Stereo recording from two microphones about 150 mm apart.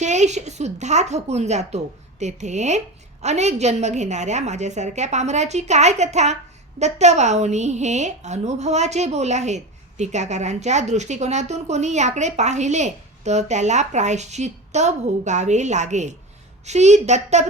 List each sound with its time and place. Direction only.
0.0 s speech: 50° right (ahead or behind)